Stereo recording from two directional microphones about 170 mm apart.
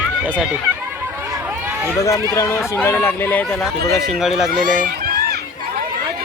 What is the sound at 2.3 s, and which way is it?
Speech, 15° left (ahead or behind).